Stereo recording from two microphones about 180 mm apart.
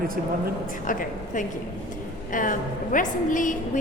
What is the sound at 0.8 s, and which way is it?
A woman's voice, 45° left (ahead or behind).